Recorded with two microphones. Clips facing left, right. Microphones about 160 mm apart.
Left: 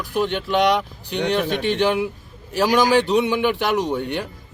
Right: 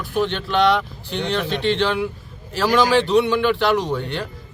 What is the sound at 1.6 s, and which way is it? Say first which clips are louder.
A man's voice: even; 15° left (ahead or behind).